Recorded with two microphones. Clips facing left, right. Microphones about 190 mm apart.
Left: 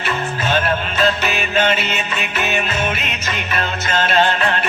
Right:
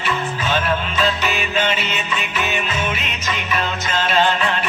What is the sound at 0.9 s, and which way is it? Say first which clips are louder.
Music: left 2 dB; 45° left (ahead or behind).